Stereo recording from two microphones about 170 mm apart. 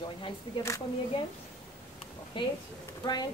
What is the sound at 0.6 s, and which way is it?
Speech, 20° left (ahead or behind).